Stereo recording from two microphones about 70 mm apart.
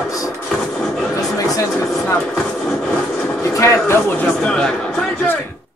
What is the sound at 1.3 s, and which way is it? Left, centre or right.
Music, left.